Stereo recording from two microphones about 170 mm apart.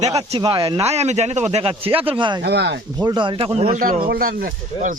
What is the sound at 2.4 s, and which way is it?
Speech, 85° right.